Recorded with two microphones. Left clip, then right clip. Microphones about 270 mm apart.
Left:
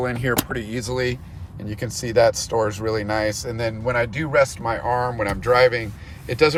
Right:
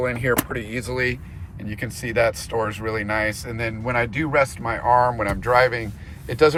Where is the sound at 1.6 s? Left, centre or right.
Centre.